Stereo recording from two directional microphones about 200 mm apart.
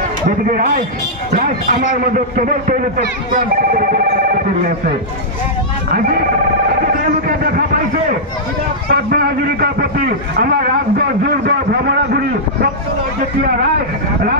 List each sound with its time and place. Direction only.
1.3 s a man's voice: 45° right (ahead or behind)
5.9 s a man's voice: 45° right (ahead or behind)
8.9 s a man's voice: 50° right (ahead or behind)